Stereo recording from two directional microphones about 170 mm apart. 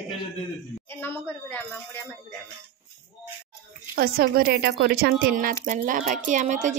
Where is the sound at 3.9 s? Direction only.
60° right (ahead or behind).